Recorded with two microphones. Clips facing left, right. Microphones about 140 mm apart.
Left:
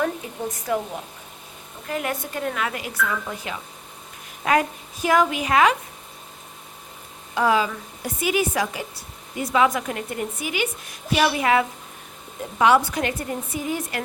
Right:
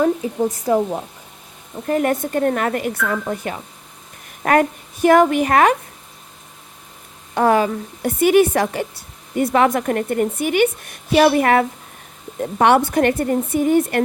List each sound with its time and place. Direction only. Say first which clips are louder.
0.0 s a woman's voice: right 8 dB; 25° right (ahead or behind); by 5.7 s 50° right (ahead or behind)
7.3 s a woman's voice: right 5 dB; 55° right (ahead or behind)